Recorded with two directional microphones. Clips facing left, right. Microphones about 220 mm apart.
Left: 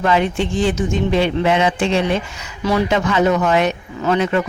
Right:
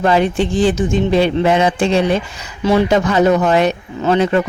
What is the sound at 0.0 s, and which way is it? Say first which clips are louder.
Speech: right 3 dB; 35° right (ahead or behind).